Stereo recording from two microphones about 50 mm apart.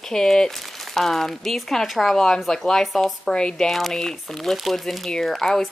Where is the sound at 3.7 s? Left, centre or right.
Centre.